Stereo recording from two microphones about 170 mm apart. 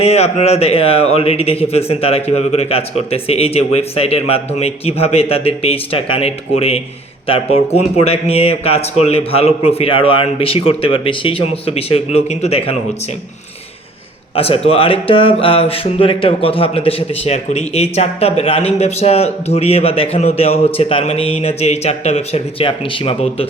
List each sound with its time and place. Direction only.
0.0 s a man's voice: 40° left (ahead or behind)
14.3 s a man's voice: 35° left (ahead or behind)